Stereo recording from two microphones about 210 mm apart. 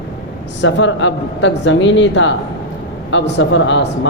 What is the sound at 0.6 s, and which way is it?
A man's voice, 60° left (ahead or behind).